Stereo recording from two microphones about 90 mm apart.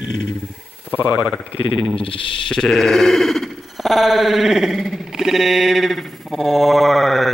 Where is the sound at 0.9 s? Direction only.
20° right (ahead or behind).